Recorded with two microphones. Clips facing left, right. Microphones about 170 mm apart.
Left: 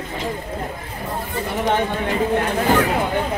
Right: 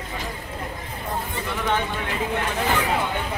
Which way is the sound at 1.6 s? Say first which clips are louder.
Left 5 dB; 40° left (ahead or behind).